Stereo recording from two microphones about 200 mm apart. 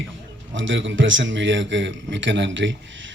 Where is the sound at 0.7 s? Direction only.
70° right (ahead or behind).